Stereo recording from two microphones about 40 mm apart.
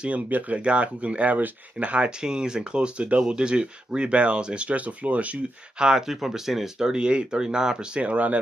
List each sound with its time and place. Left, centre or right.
0.3 s speech: right
0.6 s speech: right
4.6 s speech: right
5.8 s speech: centre
6.9 s speech: right